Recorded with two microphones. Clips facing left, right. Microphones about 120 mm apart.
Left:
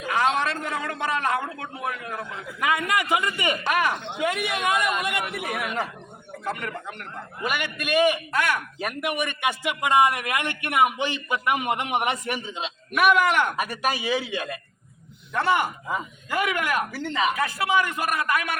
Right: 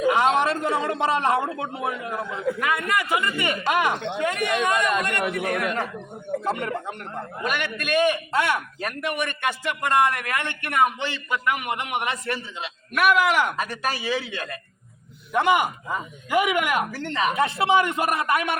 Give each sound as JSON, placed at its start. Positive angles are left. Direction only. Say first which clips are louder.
{"t": 0.3, "sound": "a man's voice", "louder": "right 5 dB", "side_deg": -25}
{"t": 2.6, "sound": "a man's voice", "louder": "left 5 dB", "side_deg": 15}
{"t": 3.7, "sound": "a man's voice", "louder": "right 2 dB", "side_deg": -20}
{"t": 4.2, "sound": "a man's voice", "louder": "right 2 dB", "side_deg": 10}
{"t": 6.4, "sound": "a man's voice", "louder": "right 1 dB", "side_deg": -25}
{"t": 7.4, "sound": "a man's voice", "louder": "even", "side_deg": 5}
{"t": 8.3, "sound": "a man's voice", "louder": "right 2 dB", "side_deg": -25}
{"t": 8.8, "sound": "a man's voice", "louder": "even", "side_deg": 10}
{"t": 12.9, "sound": "a man's voice", "louder": "even", "side_deg": 0}
{"t": 13.6, "sound": "a man's voice", "louder": "left 1 dB", "side_deg": 10}
{"t": 15.3, "sound": "speech", "louder": "right 3 dB", "side_deg": -15}
{"t": 16.9, "sound": "a man's voice", "louder": "even", "side_deg": 5}
{"t": 17.3, "sound": "a man's voice", "louder": "right 3 dB", "side_deg": -25}